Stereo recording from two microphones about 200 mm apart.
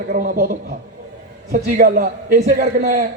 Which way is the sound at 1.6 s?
50° right (ahead or behind).